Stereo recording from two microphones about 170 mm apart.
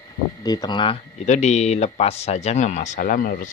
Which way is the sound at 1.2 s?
40° left (ahead or behind).